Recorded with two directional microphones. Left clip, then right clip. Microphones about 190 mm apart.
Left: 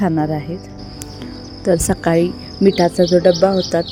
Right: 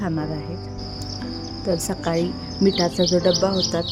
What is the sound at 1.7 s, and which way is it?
Speech, 20° left (ahead or behind).